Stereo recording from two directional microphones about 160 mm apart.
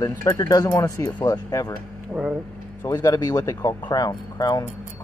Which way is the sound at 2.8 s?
20° left (ahead or behind).